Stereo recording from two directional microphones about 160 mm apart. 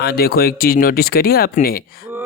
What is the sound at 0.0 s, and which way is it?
Speech, 70° left (ahead or behind).